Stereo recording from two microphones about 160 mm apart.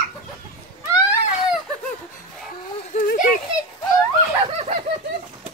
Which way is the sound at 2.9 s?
60° left (ahead or behind).